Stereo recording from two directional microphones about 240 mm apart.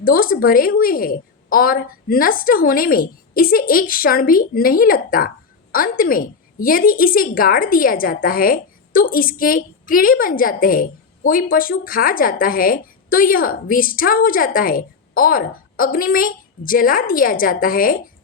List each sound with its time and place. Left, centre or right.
0.0 s a woman's voice: left